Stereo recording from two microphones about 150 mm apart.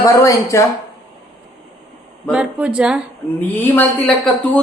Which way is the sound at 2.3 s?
5° right (ahead or behind).